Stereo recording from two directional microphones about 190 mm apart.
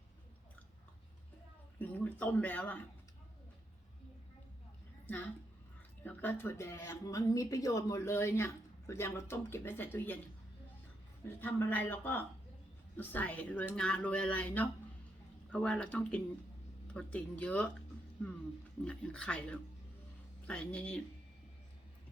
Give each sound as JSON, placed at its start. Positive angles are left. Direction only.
{"t": 1.8, "sound": "speech", "side_deg": 10}
{"t": 5.0, "sound": "a woman's voice", "side_deg": 10}
{"t": 11.2, "sound": "speech", "side_deg": 10}
{"t": 18.9, "sound": "speech", "side_deg": 5}